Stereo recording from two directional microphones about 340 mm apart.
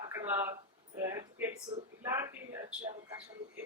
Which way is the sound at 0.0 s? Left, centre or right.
Centre.